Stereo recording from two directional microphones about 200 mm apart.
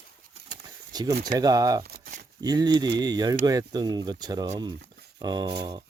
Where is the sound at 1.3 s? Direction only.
20° right (ahead or behind).